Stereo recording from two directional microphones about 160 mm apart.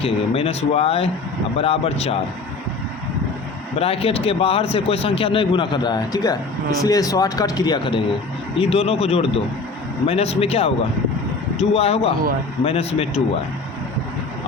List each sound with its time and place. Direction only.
0.0 s speech: 40° left (ahead or behind)
3.8 s speech: 40° left (ahead or behind)